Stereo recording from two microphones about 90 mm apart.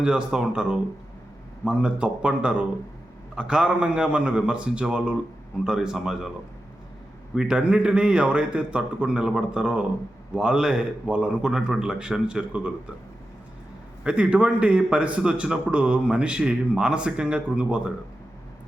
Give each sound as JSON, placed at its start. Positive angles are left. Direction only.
{"t": 0.0, "sound": "a man's voice", "side_deg": -10}
{"t": 7.3, "sound": "a man's voice", "side_deg": -10}
{"t": 14.0, "sound": "a man's voice", "side_deg": -10}